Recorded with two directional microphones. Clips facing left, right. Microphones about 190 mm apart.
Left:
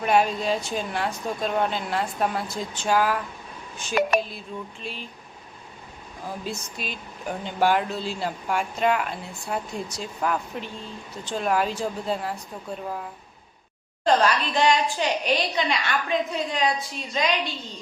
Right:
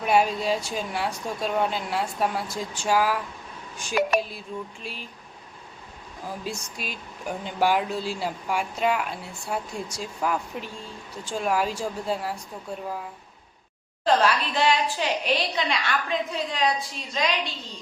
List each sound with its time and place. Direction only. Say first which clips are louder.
0.0 s speech: even; 5° right (ahead or behind)
4.0 s a sound: left 1 dB; 55° left (ahead or behind)
4.8 s speech: left 2 dB; 10° right (ahead or behind)
6.4 s speech: left 1 dB; 10° right (ahead or behind)
14.0 s a woman's voice: left 1 dB; 5° right (ahead or behind)